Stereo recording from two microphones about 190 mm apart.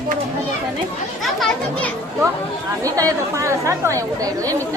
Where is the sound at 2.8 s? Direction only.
15° right (ahead or behind).